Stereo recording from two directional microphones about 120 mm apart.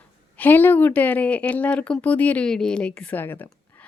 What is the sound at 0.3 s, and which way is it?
Speech, 15° left (ahead or behind).